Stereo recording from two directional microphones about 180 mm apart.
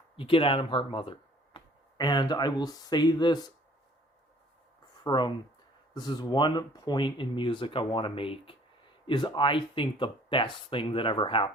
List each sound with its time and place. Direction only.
0.2 s speech: 30° left (ahead or behind)
5.0 s speech: 25° left (ahead or behind)